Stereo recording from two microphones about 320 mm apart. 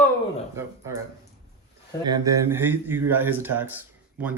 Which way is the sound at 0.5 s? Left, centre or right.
Centre.